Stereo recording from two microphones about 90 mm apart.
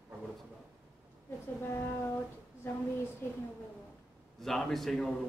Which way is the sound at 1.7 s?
30° left (ahead or behind).